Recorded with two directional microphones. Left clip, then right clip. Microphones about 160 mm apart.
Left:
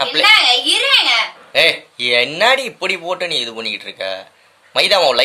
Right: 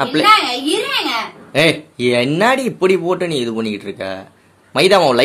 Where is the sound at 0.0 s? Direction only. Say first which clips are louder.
Left 1 dB; centre (ahead or behind).